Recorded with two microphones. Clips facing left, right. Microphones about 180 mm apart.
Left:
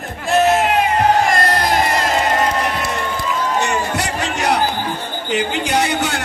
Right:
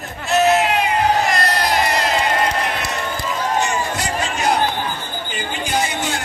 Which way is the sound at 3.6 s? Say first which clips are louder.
Left 2 dB; 65° left (ahead or behind).